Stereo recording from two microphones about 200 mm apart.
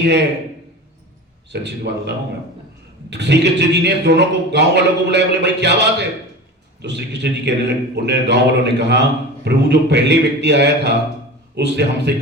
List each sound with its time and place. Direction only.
1.5 s a man's voice: 60° right (ahead or behind)